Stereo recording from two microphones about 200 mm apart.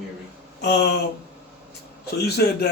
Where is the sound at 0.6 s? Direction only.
55° left (ahead or behind).